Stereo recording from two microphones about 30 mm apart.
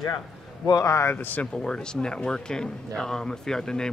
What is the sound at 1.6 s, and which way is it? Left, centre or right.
Speech, left.